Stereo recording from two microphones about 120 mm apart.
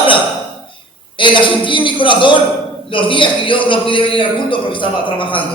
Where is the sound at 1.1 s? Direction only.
45° left (ahead or behind).